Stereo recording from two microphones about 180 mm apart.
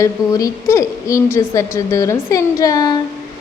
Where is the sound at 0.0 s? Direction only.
20° left (ahead or behind).